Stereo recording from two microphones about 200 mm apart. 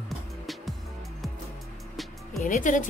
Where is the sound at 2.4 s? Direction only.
40° left (ahead or behind).